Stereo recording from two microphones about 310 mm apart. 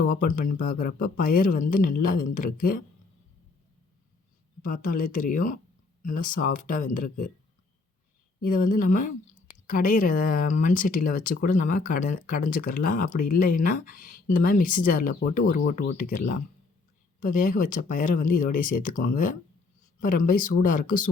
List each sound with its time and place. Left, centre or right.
0.3 s speech: left
4.6 s speech: left
8.4 s speech: left